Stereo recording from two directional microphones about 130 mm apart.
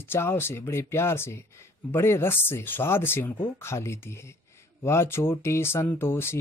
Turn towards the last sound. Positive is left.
turn(degrees=20)  # may be behind; listen again after turning